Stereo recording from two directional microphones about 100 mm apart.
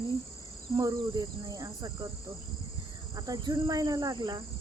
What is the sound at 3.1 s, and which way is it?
Cricket, 40° right (ahead or behind).